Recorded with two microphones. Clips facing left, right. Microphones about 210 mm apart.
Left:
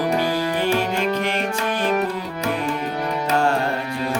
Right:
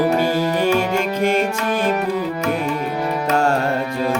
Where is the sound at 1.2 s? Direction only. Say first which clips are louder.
Right 6 dB; 45° right (ahead or behind).